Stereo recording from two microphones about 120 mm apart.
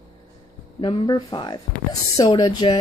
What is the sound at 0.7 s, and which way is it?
Speech, 40° left (ahead or behind).